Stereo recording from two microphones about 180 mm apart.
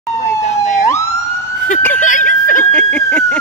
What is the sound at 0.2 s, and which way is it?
Emergency vehicle, 40° left (ahead or behind).